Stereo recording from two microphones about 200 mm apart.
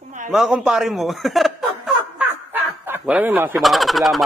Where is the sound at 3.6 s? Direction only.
Centre (ahead or behind).